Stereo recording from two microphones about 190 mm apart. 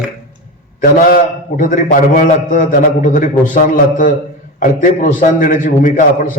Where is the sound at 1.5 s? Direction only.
45° left (ahead or behind).